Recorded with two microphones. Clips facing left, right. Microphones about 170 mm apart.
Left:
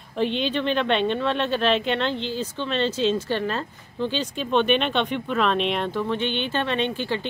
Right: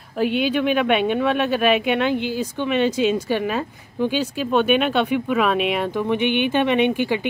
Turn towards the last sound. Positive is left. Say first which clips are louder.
# right 6 dB
turn(degrees=-15)  # may be behind; listen again after turning